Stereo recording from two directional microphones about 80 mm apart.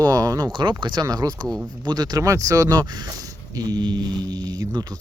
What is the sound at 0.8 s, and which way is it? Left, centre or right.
Speech, right.